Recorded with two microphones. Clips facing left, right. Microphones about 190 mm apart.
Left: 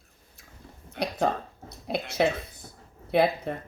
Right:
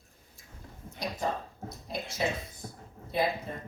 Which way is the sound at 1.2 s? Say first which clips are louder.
Left 6 dB; 70° left (ahead or behind).